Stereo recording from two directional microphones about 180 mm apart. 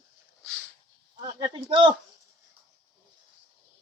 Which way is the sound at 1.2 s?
25° right (ahead or behind).